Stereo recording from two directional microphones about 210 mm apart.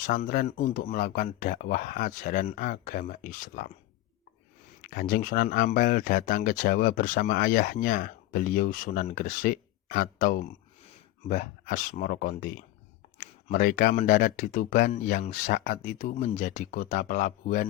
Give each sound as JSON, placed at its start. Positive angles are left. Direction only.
{"t": 0.0, "sound": "speech", "side_deg": 40}
{"t": 4.8, "sound": "speech", "side_deg": 45}
{"t": 6.7, "sound": "speech", "side_deg": 50}